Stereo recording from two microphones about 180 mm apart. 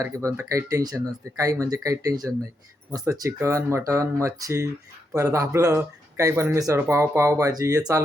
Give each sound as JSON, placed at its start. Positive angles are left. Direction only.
{"t": 0.0, "sound": "speech", "side_deg": -15}